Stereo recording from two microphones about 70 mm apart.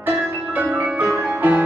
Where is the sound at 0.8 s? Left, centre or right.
Right.